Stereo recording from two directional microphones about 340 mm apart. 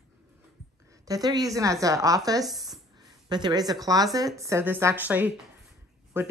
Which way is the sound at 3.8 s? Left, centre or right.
Centre.